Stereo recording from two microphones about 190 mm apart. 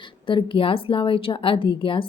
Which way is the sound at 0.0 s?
25° left (ahead or behind).